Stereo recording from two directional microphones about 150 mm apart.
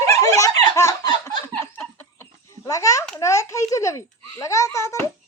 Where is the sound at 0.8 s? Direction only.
25° left (ahead or behind).